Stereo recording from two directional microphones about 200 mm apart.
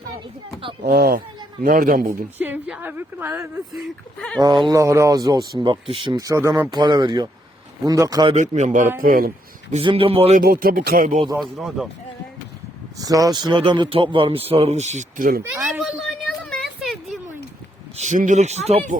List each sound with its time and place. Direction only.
0.6 s speech: 25° right (ahead or behind)
0.9 s speech: 55° right (ahead or behind)
2.4 s a woman's voice: 5° right (ahead or behind)
3.8 s speech: 5° left (ahead or behind)
4.4 s a man's voice: 20° right (ahead or behind)
8.3 s speech: 35° right (ahead or behind)
9.7 s a man's voice: 25° right (ahead or behind)
10.4 s speech: 50° right (ahead or behind)
11.3 s speech: centre (ahead or behind)
13.0 s a man's voice: 15° right (ahead or behind); by 15.4 s 45° right (ahead or behind)
15.4 s speech: 10° right (ahead or behind)
15.8 s a sound: 5° left (ahead or behind)
17.9 s speech: 35° right (ahead or behind)